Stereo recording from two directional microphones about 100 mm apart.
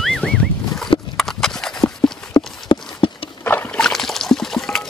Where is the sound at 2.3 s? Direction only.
60° left (ahead or behind).